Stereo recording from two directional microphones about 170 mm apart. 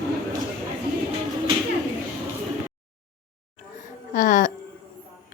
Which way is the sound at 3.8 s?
50° left (ahead or behind).